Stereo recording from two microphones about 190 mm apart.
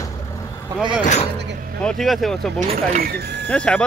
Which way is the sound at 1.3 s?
60° right (ahead or behind).